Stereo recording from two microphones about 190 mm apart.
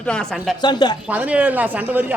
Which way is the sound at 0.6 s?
25° left (ahead or behind).